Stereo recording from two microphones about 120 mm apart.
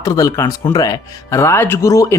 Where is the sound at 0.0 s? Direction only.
30° left (ahead or behind).